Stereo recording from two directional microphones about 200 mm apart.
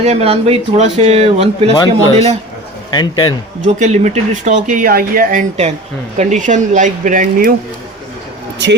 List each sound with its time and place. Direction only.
0.0 s speech: 30° right (ahead or behind)
2.9 s a man's voice: 20° left (ahead or behind)
3.6 s speech: 35° right (ahead or behind)